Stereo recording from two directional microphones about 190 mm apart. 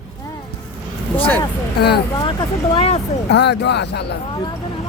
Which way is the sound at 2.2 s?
25° left (ahead or behind).